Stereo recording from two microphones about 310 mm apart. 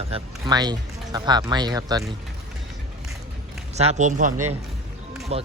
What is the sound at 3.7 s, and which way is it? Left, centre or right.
Speech, right.